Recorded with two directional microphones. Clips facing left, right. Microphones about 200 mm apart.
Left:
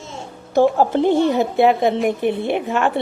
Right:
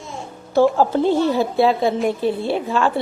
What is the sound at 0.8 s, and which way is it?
A woman's voice, 20° left (ahead or behind).